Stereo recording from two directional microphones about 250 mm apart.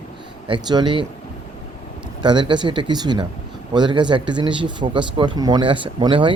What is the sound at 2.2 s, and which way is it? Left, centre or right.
Speech, centre.